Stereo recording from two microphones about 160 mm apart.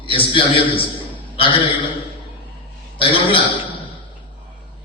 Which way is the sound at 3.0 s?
35° left (ahead or behind).